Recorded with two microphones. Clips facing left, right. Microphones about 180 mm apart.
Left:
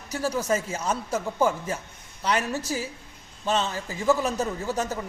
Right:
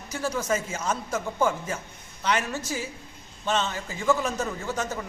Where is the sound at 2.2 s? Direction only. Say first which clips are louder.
Left 1 dB; 35° left (ahead or behind).